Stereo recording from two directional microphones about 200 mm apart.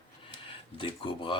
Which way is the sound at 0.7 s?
25° left (ahead or behind).